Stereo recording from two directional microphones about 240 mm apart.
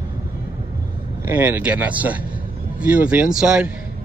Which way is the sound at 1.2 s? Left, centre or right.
Centre.